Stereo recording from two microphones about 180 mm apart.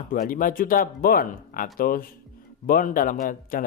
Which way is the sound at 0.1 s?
50° left (ahead or behind).